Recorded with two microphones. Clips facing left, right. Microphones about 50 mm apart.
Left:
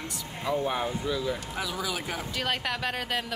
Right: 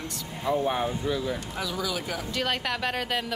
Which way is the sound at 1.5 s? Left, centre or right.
Centre.